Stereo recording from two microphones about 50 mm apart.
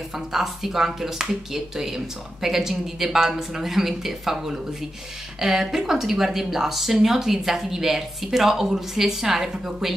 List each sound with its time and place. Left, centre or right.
0.3 s speech: centre